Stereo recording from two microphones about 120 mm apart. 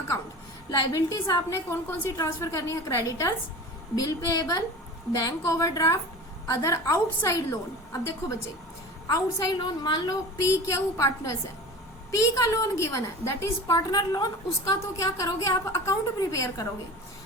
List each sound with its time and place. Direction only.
0.7 s a woman's voice: 30° left (ahead or behind)
9.0 s a woman's voice: 35° left (ahead or behind)
10.4 s a woman's voice: 25° left (ahead or behind)